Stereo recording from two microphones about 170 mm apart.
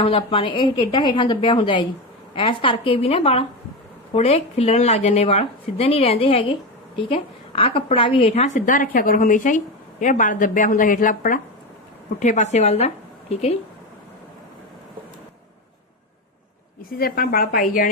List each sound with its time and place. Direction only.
0.0 s a woman's voice: 35° left (ahead or behind)
17.0 s a woman's voice: 60° left (ahead or behind)